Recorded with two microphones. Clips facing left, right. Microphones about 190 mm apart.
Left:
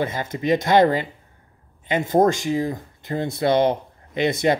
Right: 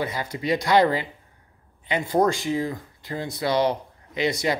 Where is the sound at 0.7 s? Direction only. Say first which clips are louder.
Left 2 dB; 45° left (ahead or behind).